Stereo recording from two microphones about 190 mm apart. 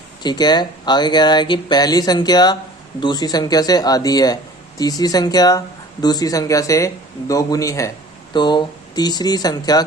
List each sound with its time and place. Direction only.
0.2 s speech: 20° left (ahead or behind)